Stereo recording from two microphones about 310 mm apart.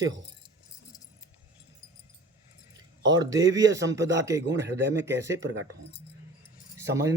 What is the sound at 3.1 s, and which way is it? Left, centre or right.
Speech, centre.